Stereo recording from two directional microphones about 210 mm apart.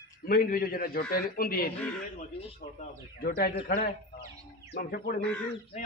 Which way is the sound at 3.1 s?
45° left (ahead or behind).